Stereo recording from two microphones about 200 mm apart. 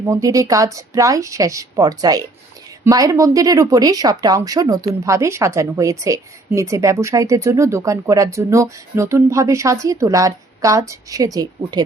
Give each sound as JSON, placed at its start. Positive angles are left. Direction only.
{"t": 0.0, "sound": "a woman's voice", "side_deg": -15}